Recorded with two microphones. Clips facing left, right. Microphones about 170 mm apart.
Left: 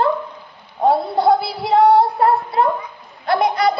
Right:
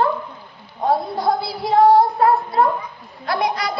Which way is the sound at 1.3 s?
65° left (ahead or behind).